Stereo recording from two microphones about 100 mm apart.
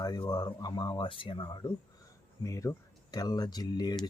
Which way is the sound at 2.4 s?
30° left (ahead or behind).